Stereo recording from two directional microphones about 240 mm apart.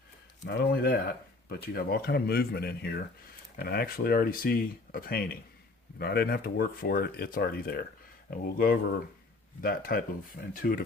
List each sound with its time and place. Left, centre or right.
0.4 s speech: left